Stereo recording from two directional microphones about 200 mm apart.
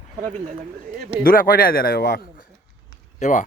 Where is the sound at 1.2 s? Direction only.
45° left (ahead or behind).